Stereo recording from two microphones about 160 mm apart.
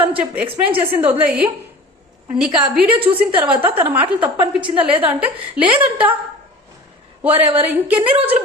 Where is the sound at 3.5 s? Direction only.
35° right (ahead or behind).